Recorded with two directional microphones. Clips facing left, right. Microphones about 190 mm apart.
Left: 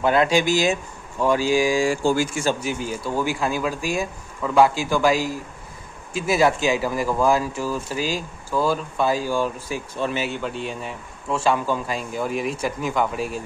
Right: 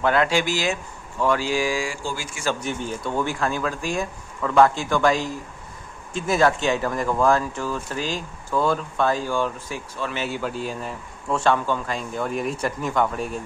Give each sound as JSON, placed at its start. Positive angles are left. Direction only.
{"t": 0.0, "sound": "speech", "side_deg": 15}
{"t": 1.9, "sound": "speech", "side_deg": 50}
{"t": 2.6, "sound": "speech", "side_deg": 5}
{"t": 9.9, "sound": "speech", "side_deg": 20}
{"t": 10.3, "sound": "a man's voice", "side_deg": 0}